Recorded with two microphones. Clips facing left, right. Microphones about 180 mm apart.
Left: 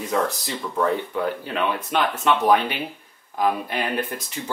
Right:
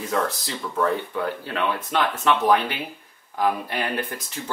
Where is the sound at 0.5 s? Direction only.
5° left (ahead or behind).